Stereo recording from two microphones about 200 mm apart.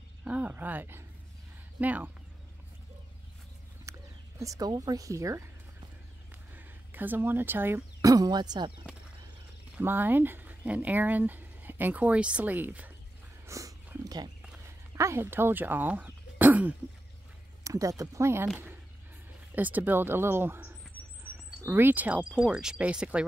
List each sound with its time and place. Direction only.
0.2 s a sound: 5° right (ahead or behind)
1.8 s speech: 10° right (ahead or behind)
3.9 s a sound: 15° right (ahead or behind)
4.4 s speech: 15° right (ahead or behind)
6.5 s speech: 10° right (ahead or behind)
9.8 s speech: 10° right (ahead or behind)
13.5 s dog: 15° right (ahead or behind)
15.0 s speech: 15° right (ahead or behind)
19.5 s speech: 10° right (ahead or behind)